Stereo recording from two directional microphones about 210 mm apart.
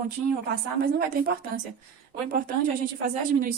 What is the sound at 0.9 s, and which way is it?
Speech, 45° right (ahead or behind).